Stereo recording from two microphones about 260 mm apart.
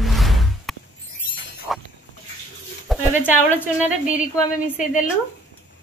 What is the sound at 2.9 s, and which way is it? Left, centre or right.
Speech, centre.